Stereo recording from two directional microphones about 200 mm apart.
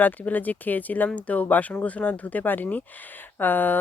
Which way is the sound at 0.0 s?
10° left (ahead or behind).